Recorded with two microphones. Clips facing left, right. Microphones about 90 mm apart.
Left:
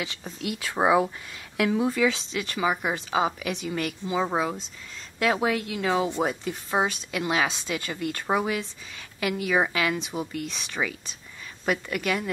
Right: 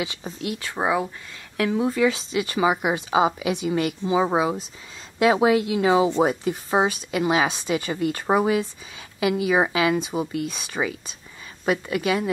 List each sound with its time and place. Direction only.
0.0 s speech: 10° right (ahead or behind)
0.4 s speech: centre (ahead or behind)
0.8 s speech: 15° left (ahead or behind)
1.9 s speech: 5° right (ahead or behind)